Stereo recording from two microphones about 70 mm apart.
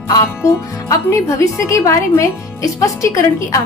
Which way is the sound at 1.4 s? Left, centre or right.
Left.